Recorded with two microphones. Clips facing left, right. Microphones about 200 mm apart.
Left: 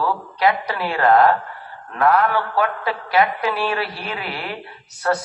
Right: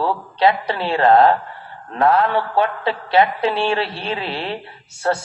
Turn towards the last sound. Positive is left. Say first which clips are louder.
# right 1 dB
turn(degrees=-25)  # may be behind; listen again after turning